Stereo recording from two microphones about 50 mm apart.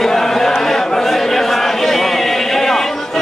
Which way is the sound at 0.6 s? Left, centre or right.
Centre.